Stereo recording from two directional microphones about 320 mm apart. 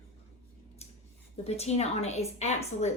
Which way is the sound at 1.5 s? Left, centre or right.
Centre.